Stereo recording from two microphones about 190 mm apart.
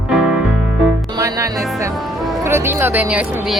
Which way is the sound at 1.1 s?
15° right (ahead or behind).